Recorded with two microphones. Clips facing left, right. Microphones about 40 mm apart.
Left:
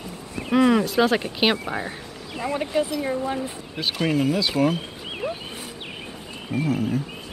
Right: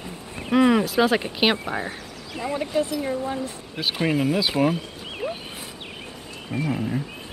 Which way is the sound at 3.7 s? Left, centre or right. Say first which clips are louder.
Even; centre.